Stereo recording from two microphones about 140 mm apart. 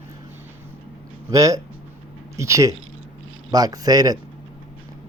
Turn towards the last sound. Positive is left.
turn(degrees=-25)  # may be behind; listen again after turning